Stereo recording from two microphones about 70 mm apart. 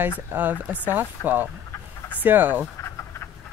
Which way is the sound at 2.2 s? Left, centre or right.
Right.